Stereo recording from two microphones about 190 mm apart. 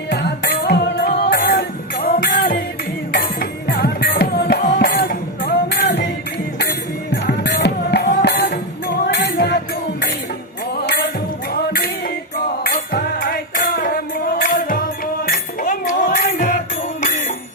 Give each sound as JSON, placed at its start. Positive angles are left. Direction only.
{"t": 0.1, "sound": "music", "side_deg": 55}
{"t": 11.5, "sound": "music", "side_deg": 50}